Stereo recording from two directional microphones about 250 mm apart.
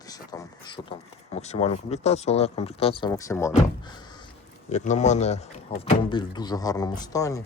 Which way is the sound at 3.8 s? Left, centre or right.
Centre.